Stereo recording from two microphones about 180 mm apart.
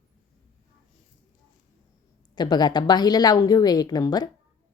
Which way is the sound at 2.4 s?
25° left (ahead or behind).